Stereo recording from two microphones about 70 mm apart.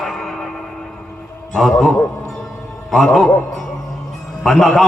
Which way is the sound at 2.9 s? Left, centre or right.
Centre.